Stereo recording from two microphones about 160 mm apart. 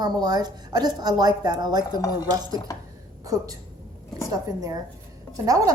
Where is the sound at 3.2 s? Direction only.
20° right (ahead or behind).